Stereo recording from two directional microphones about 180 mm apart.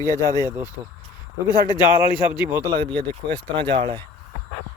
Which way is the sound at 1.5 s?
25° left (ahead or behind).